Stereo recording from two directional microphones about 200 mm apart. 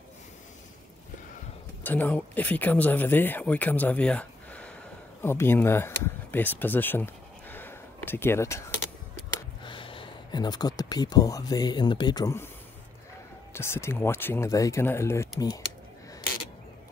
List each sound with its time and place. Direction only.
1.8 s speech: 10° left (ahead or behind)
9.6 s speech: 25° left (ahead or behind)
13.5 s speech: 10° left (ahead or behind)